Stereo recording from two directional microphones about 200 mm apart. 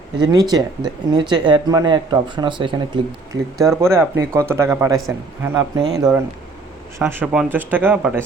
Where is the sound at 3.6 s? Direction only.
15° right (ahead or behind).